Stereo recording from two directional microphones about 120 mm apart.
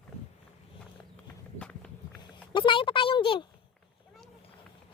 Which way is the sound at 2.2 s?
40° left (ahead or behind).